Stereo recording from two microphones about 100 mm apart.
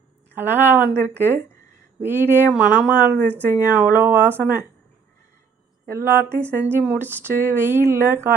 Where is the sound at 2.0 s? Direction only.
20° right (ahead or behind).